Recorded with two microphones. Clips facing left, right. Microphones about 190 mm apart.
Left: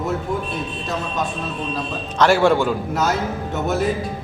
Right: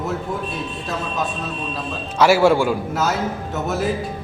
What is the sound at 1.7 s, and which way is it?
A man's voice, 5° right (ahead or behind).